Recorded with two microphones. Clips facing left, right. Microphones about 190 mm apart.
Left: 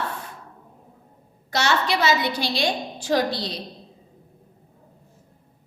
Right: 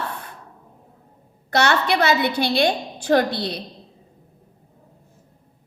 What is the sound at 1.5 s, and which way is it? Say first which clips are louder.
A woman's voice: right 3 dB; 60° right (ahead or behind).